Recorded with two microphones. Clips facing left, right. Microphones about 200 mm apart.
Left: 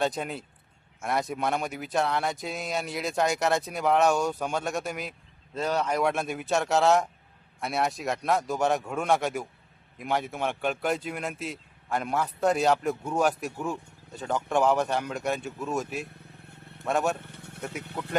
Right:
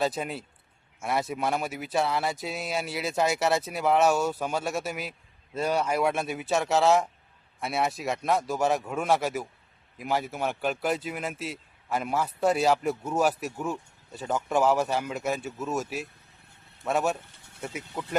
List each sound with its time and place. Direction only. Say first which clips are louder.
0.0 s speech: even; centre (ahead or behind)
17.2 s vehicle: left 5 dB; 60° left (ahead or behind)